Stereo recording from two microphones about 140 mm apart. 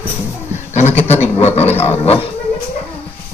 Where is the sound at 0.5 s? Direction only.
55° left (ahead or behind).